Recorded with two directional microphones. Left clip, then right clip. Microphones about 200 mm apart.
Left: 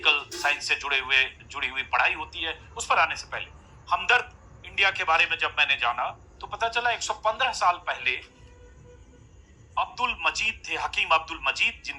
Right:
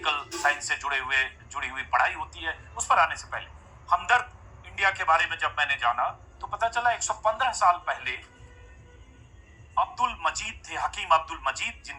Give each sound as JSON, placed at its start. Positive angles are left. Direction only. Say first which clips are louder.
{"t": 0.0, "sound": "a man's voice", "louder": "left 2 dB", "side_deg": 20}
{"t": 9.7, "sound": "a man's voice", "louder": "right 1 dB", "side_deg": 20}